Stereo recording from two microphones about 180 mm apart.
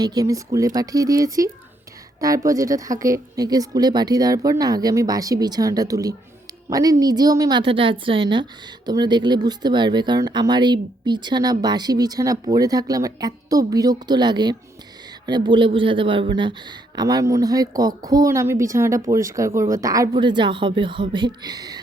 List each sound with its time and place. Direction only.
0.0 s speech: 20° right (ahead or behind)